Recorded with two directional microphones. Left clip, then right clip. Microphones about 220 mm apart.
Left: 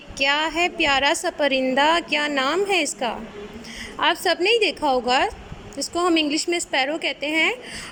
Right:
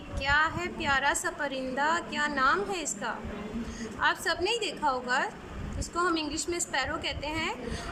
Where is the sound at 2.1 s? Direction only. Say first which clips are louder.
Left 5 dB; 25° left (ahead or behind).